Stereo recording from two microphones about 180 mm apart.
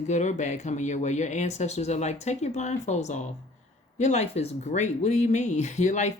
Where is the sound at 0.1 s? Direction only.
40° left (ahead or behind).